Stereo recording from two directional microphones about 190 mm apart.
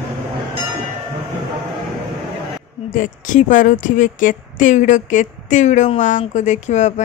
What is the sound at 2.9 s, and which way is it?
A woman's voice, 40° left (ahead or behind).